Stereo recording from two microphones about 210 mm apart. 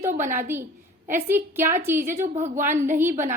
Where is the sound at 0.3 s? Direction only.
10° right (ahead or behind).